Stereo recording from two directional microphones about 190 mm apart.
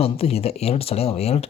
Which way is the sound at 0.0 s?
30° left (ahead or behind).